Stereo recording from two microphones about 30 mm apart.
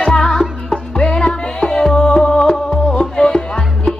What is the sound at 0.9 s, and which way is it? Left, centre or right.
Music, left.